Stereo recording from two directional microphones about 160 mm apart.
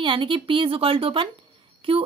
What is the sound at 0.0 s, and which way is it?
Speech, 30° right (ahead or behind).